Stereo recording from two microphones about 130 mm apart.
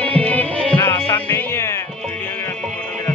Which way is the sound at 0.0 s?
10° left (ahead or behind).